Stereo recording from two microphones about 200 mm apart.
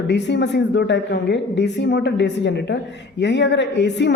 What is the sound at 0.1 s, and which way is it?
A woman's voice, 60° left (ahead or behind).